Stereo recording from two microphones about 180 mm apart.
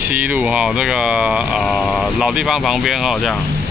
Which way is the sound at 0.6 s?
Centre (ahead or behind).